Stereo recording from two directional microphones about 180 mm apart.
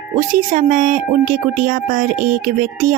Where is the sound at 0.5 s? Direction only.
50° right (ahead or behind).